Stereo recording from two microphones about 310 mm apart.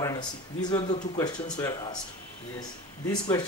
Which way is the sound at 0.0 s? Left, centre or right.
Centre.